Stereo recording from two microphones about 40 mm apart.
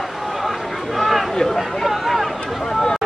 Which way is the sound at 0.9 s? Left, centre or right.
Centre.